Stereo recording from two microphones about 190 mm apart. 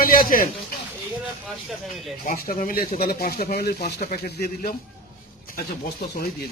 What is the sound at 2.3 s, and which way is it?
Speech, 45° left (ahead or behind).